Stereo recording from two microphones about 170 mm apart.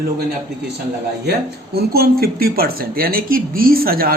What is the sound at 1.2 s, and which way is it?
Speech, 70° right (ahead or behind).